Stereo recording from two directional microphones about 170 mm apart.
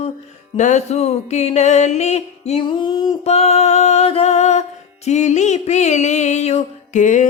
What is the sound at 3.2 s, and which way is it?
Music, 40° left (ahead or behind).